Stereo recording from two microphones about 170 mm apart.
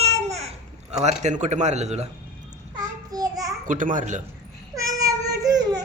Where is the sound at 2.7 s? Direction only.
20° right (ahead or behind).